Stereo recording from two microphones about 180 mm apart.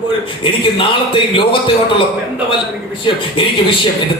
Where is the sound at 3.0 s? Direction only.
30° left (ahead or behind).